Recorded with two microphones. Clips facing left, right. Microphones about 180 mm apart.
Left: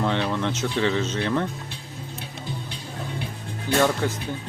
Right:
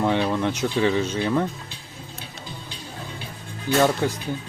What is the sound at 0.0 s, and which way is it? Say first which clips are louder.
Speech: right 3 dB; 15° right (ahead or behind).